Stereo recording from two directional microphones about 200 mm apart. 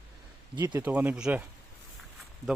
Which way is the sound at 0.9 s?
10° right (ahead or behind).